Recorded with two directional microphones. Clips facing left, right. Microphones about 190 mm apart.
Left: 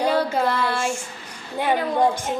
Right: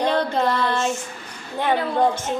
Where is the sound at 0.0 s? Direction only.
10° left (ahead or behind).